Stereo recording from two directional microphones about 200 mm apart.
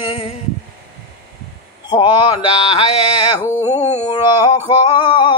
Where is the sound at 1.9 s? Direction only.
25° left (ahead or behind).